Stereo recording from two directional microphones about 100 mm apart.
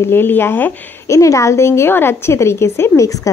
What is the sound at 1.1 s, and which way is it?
Speech, 30° left (ahead or behind).